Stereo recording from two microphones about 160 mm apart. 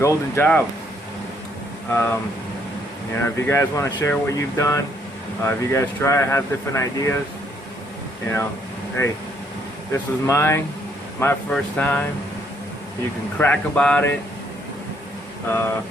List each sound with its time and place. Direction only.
0.0 s speech: 15° left (ahead or behind)
1.9 s speech: 15° left (ahead or behind)
3.2 s speech: 15° left (ahead or behind)
9.9 s speech: 15° left (ahead or behind)
13.4 s speech: 10° left (ahead or behind)
15.4 s speech: 15° left (ahead or behind)